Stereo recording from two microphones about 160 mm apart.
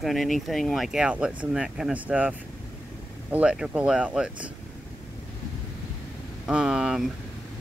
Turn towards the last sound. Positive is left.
turn(degrees=-5)  # may be behind; listen again after turning